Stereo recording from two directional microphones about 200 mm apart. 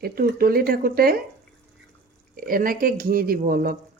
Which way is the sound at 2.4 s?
45° right (ahead or behind).